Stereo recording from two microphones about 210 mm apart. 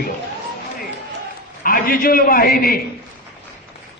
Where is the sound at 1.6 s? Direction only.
45° left (ahead or behind).